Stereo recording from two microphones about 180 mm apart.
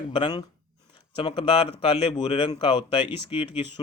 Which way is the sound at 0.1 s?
25° left (ahead or behind).